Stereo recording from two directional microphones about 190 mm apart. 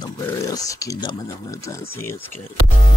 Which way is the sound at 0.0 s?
20° left (ahead or behind).